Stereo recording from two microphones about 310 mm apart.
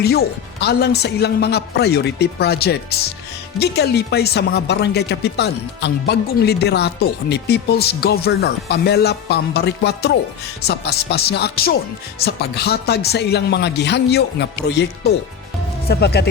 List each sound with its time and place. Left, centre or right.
0.0 s speech: left
15.9 s speech: left